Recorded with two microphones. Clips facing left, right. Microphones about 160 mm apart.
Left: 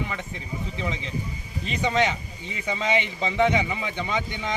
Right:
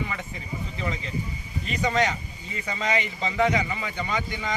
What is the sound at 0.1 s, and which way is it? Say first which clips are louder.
Speech: left 1 dB; 5° right (ahead or behind).